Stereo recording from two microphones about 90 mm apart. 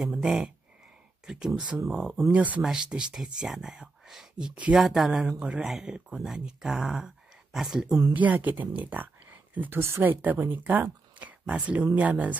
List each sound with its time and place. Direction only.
0.0 s speech: 5° right (ahead or behind)
2.3 s speech: 15° right (ahead or behind)
8.1 s speech: 15° right (ahead or behind)